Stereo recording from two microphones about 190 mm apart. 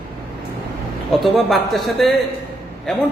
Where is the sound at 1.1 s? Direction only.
Centre (ahead or behind).